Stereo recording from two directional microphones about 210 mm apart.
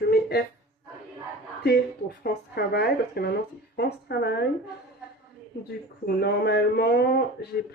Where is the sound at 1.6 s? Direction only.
50° left (ahead or behind).